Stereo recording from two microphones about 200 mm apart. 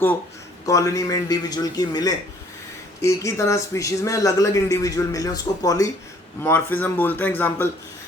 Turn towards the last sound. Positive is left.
turn(degrees=10)  # may be behind; listen again after turning